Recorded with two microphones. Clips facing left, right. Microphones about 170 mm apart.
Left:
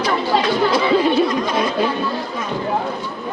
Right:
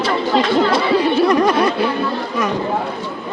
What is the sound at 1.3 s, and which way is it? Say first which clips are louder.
Speech: right 6 dB; 65° right (ahead or behind).